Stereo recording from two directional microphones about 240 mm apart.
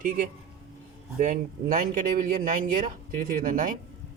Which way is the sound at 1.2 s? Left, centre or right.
Right.